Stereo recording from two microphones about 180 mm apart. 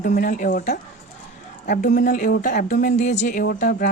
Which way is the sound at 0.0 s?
45° left (ahead or behind).